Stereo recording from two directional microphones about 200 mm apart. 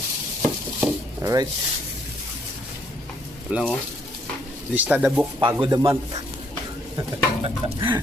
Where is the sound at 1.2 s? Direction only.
15° right (ahead or behind).